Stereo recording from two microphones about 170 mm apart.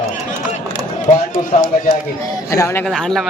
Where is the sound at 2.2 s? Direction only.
20° left (ahead or behind).